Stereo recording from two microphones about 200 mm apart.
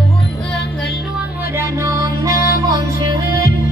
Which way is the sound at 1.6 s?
15° right (ahead or behind).